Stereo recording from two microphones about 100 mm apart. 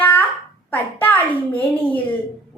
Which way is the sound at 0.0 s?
15° left (ahead or behind).